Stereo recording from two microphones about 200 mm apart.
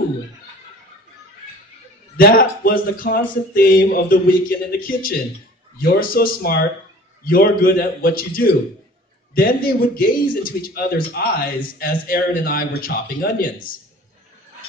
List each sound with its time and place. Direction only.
2.1 s speech: 45° left (ahead or behind)